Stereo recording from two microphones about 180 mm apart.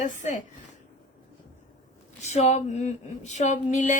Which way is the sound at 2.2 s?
40° left (ahead or behind).